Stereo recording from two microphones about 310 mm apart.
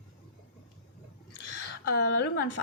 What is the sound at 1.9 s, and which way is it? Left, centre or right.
Speech, left.